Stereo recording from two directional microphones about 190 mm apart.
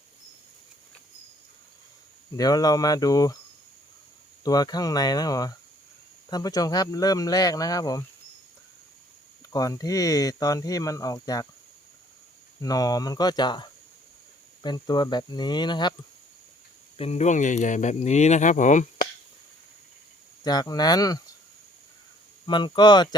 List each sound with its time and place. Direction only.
2.3 s speech: 20° left (ahead or behind)
4.4 s speech: 20° left (ahead or behind)
9.5 s speech: 20° left (ahead or behind)
12.6 s speech: 20° left (ahead or behind)
17.0 s speech: 35° left (ahead or behind)
20.4 s speech: 20° left (ahead or behind)
22.4 s speech: 25° left (ahead or behind)